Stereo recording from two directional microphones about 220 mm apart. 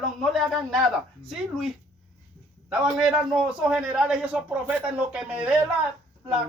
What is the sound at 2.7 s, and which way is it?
A man's voice, 5° right (ahead or behind).